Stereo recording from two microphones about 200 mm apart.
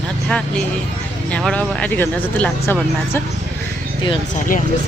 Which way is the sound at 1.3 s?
5° left (ahead or behind).